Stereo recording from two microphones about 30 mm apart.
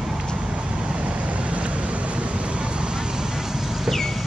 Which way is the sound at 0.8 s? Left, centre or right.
Right.